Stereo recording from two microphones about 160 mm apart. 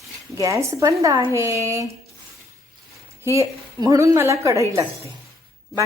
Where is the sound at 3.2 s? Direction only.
20° right (ahead or behind).